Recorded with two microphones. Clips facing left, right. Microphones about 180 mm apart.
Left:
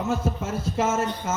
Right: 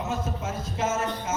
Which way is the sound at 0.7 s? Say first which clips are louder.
Left 3 dB; 50° left (ahead or behind).